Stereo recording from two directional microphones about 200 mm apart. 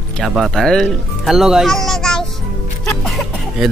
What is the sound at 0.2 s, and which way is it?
Speech, centre (ahead or behind).